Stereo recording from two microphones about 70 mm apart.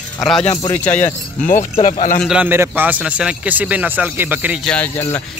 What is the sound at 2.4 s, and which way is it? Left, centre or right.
Speech, right.